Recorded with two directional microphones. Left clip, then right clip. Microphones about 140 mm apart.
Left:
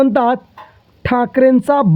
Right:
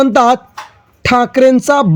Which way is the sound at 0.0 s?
40° right (ahead or behind).